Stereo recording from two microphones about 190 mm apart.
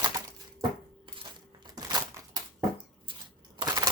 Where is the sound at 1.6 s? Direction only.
20° right (ahead or behind).